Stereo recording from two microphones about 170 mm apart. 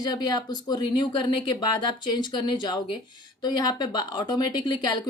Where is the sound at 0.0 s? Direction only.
25° left (ahead or behind).